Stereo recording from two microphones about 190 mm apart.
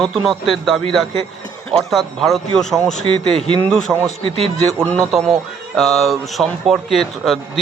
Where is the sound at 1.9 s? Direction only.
Centre (ahead or behind).